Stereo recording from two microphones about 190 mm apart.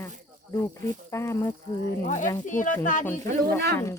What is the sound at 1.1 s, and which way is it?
Speech, 15° left (ahead or behind).